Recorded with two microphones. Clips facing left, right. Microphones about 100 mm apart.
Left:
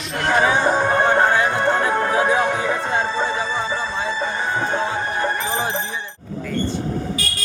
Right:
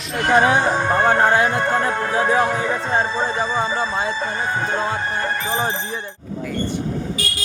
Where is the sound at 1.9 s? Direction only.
25° left (ahead or behind).